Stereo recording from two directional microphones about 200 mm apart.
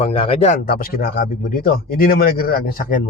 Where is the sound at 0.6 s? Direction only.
45° left (ahead or behind).